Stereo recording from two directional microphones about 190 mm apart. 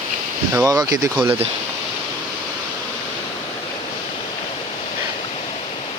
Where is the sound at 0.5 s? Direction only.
20° right (ahead or behind).